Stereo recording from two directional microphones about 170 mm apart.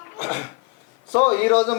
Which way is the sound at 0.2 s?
15° left (ahead or behind).